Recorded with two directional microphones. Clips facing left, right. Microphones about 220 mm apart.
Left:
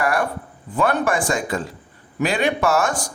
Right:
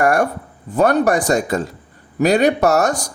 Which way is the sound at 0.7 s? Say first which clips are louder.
Right 5 dB; 40° right (ahead or behind).